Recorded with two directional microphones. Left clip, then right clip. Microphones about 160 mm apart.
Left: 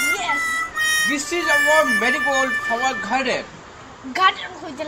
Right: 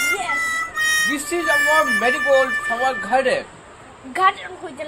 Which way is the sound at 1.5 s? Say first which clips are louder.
Even; centre (ahead or behind).